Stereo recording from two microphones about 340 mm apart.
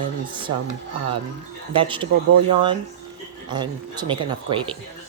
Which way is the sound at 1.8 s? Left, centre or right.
Centre.